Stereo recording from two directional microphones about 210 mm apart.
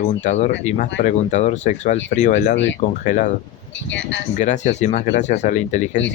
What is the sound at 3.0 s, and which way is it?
Speech, 40° left (ahead or behind).